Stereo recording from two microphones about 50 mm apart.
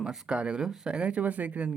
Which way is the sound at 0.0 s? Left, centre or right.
Centre.